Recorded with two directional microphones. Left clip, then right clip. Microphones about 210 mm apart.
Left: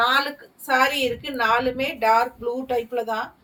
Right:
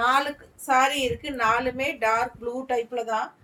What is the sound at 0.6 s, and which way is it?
A woman's voice, 15° right (ahead or behind).